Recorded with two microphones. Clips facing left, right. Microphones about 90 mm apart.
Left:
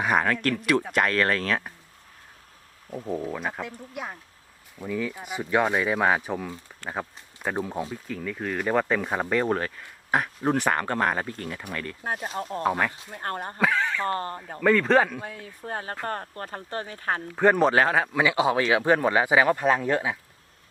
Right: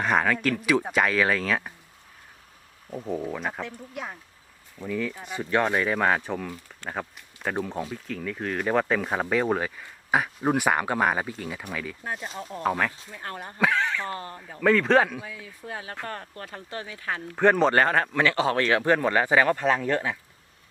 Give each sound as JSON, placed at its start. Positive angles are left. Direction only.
{"t": 0.0, "sound": "speech", "side_deg": 5}
{"t": 2.9, "sound": "speech", "side_deg": 0}
{"t": 12.0, "sound": "speech", "side_deg": 45}
{"t": 13.6, "sound": "speech", "side_deg": 0}
{"t": 14.1, "sound": "speech", "side_deg": 50}
{"t": 14.6, "sound": "speech", "side_deg": 0}
{"t": 15.2, "sound": "speech", "side_deg": 45}
{"t": 17.3, "sound": "speech", "side_deg": 5}